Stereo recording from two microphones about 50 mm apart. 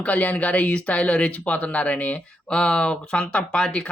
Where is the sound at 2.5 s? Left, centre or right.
Centre.